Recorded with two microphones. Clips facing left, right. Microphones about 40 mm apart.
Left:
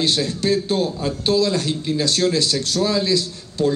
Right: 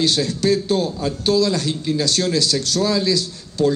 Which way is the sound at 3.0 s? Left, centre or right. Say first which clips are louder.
Even; left.